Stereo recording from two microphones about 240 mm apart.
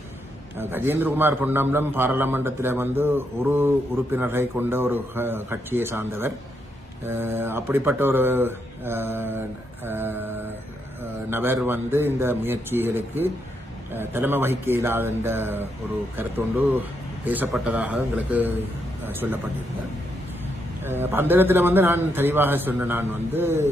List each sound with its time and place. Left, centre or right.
0.6 s speech: centre
17.2 s speech: centre
20.8 s speech: centre